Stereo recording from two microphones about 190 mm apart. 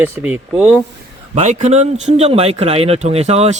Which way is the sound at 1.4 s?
40° right (ahead or behind).